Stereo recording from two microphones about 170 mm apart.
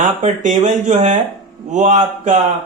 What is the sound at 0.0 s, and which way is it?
Speech, 45° right (ahead or behind).